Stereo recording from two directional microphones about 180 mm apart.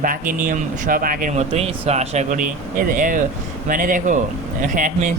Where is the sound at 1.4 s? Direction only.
35° right (ahead or behind).